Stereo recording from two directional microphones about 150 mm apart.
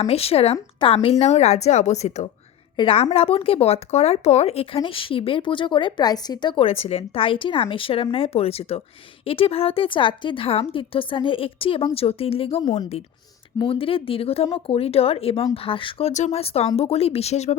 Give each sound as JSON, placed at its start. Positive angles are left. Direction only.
{"t": 0.0, "sound": "speech", "side_deg": 40}
{"t": 2.7, "sound": "speech", "side_deg": 35}